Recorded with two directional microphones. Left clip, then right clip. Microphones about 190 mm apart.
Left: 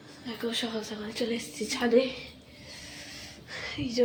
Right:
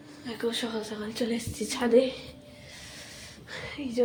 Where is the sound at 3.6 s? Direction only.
Centre (ahead or behind).